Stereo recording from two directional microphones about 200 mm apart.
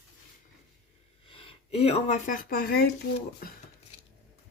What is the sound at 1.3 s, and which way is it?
Speech, 30° left (ahead or behind).